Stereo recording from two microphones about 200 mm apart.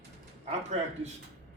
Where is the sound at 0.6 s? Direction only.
35° right (ahead or behind).